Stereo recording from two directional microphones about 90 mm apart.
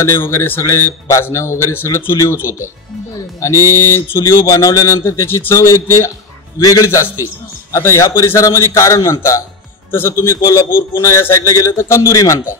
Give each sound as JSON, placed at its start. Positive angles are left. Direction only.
{"t": 0.0, "sound": "a man's voice", "side_deg": 35}